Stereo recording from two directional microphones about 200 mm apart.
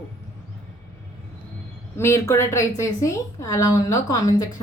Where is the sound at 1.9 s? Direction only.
15° left (ahead or behind).